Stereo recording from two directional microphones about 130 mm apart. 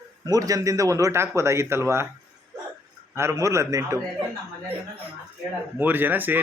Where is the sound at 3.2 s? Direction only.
20° right (ahead or behind).